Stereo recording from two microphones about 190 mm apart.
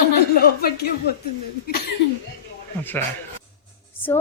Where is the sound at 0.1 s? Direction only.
55° left (ahead or behind).